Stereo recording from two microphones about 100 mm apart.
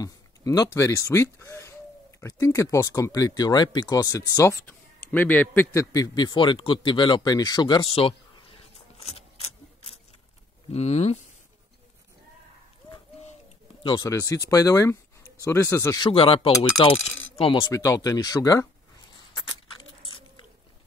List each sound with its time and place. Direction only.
0.0 s speech: 35° left (ahead or behind)
4.6 s speech: 15° left (ahead or behind); by 7.9 s 50° left (ahead or behind)
8.9 s a sound: 90° left
10.7 s speech: 90° left
12.9 s bird: 90° left
14.0 s speech: 30° left (ahead or behind)
16.0 s speech: 65° left (ahead or behind)
17.7 s speech: 35° left (ahead or behind)